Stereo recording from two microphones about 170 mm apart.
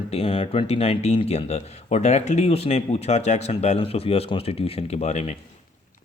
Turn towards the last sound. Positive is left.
turn(degrees=40)  # may be behind; listen again after turning